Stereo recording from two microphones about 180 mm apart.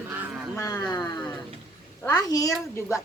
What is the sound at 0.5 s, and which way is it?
Speech, 20° left (ahead or behind).